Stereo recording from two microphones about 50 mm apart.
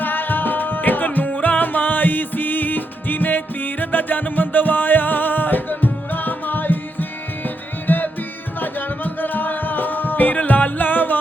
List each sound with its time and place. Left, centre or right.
0.0 s music: left